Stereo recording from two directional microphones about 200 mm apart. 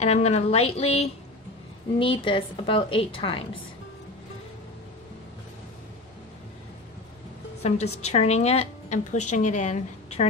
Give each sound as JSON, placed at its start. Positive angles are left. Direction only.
{"t": 0.0, "sound": "a woman's voice", "side_deg": 30}
{"t": 7.6, "sound": "a woman's voice", "side_deg": 30}